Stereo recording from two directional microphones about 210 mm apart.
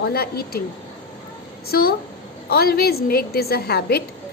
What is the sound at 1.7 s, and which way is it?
A woman's voice, 45° left (ahead or behind).